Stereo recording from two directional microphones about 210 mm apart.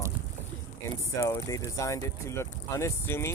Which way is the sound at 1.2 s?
15° left (ahead or behind).